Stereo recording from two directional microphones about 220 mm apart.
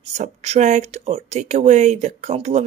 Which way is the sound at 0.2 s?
30° right (ahead or behind).